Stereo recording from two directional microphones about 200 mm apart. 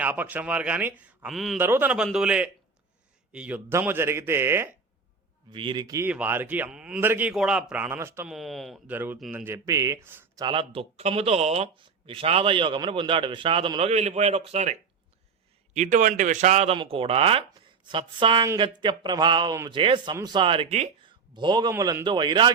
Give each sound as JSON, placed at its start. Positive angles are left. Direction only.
{"t": 0.0, "sound": "a man's voice", "side_deg": -10}
{"t": 5.5, "sound": "speech", "side_deg": -25}
{"t": 8.3, "sound": "speech", "side_deg": 0}
{"t": 10.4, "sound": "speech", "side_deg": -25}